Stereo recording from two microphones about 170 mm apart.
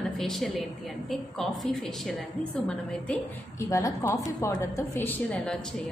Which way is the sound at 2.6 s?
10° left (ahead or behind).